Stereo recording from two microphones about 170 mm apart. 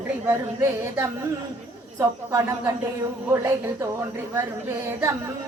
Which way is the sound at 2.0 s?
15° right (ahead or behind).